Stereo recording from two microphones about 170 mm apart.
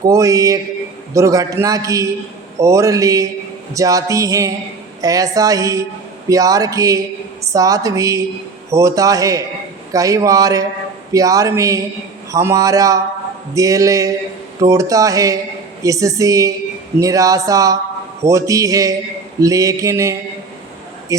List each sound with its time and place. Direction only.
0.1 s a man's voice: 20° right (ahead or behind)